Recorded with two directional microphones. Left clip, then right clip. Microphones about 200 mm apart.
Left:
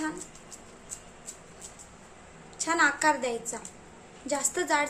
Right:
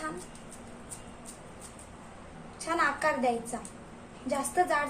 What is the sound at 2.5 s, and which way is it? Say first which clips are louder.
A woman's voice: left 4 dB; 30° left (ahead or behind).